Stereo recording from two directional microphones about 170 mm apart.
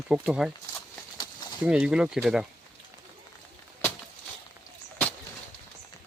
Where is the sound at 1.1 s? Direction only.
25° left (ahead or behind).